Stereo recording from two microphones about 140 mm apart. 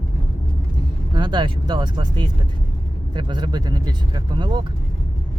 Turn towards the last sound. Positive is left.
turn(degrees=-35)  # may be behind; listen again after turning